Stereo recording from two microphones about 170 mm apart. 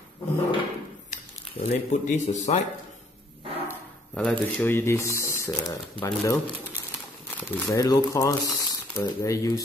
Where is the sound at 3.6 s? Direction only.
5° left (ahead or behind).